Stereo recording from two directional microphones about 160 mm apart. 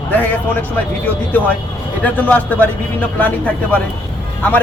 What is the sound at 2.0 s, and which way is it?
A man's voice, 10° left (ahead or behind).